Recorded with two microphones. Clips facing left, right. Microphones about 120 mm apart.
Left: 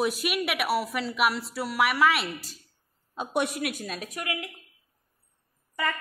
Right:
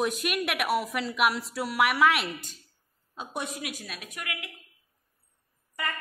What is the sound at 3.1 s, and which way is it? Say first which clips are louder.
Speech: left 7 dB; 65° left (ahead or behind).